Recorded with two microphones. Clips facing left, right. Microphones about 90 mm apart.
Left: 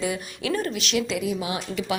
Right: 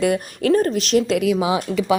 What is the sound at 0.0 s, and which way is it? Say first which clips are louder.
Speech: right 9 dB; 55° right (ahead or behind).